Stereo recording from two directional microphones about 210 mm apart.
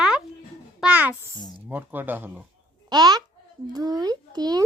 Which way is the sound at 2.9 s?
20° right (ahead or behind).